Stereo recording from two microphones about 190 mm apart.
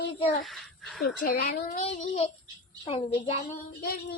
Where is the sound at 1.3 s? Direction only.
45° left (ahead or behind).